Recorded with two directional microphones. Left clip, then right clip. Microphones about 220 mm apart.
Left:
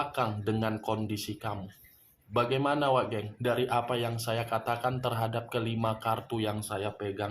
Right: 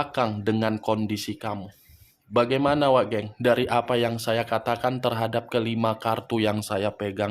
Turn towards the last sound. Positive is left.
turn(degrees=-45)  # may be behind; listen again after turning